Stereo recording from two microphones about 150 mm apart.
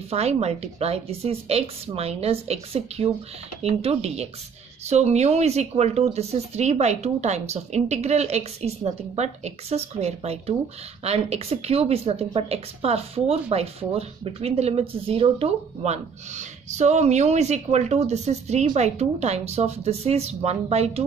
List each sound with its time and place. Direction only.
0.1 s speech: 45° right (ahead or behind)